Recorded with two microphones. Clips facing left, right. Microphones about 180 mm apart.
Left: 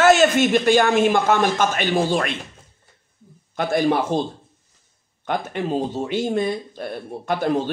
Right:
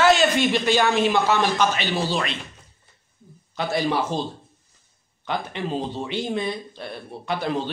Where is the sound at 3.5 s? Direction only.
50° left (ahead or behind).